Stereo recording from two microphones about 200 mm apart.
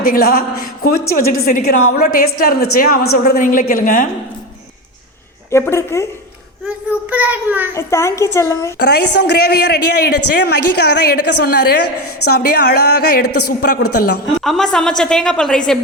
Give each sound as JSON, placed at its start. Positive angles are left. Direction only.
{"t": 0.0, "sound": "a woman's voice", "side_deg": 45}
{"t": 5.5, "sound": "speech", "side_deg": 15}
{"t": 6.7, "sound": "a child's voice", "side_deg": -5}
{"t": 7.7, "sound": "speech", "side_deg": 15}
{"t": 8.8, "sound": "a man's voice", "side_deg": 55}
{"t": 13.2, "sound": "a woman's voice", "side_deg": 90}
{"t": 14.4, "sound": "a woman's voice", "side_deg": 0}